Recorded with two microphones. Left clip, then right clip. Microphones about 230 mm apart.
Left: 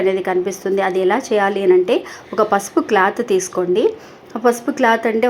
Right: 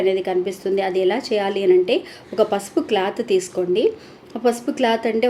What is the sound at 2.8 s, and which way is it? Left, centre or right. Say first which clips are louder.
Speech: left 5 dB; centre.